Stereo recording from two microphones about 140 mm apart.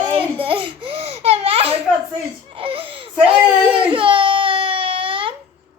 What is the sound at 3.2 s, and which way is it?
Speech, 40° right (ahead or behind).